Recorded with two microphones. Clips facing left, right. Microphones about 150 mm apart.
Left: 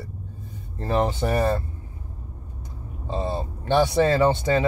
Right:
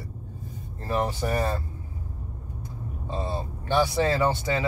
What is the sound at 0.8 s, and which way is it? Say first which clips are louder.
Speech: left 4 dB; 25° left (ahead or behind).